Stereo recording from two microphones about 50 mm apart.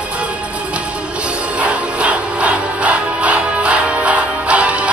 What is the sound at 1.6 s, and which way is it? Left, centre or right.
Music, right.